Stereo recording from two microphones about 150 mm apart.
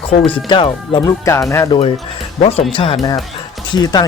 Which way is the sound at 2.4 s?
40° left (ahead or behind).